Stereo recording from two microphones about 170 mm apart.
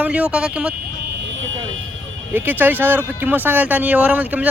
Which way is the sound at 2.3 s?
10° right (ahead or behind).